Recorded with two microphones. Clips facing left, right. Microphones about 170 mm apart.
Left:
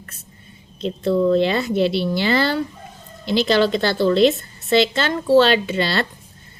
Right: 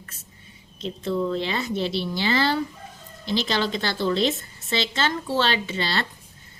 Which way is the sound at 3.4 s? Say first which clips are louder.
Left 11 dB; 60° left (ahead or behind).